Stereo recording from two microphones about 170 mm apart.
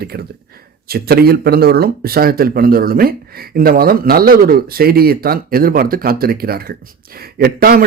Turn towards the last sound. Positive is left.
turn(degrees=-60)  # may be behind; listen again after turning